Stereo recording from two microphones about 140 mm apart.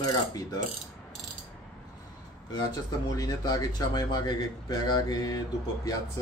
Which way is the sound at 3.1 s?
25° left (ahead or behind).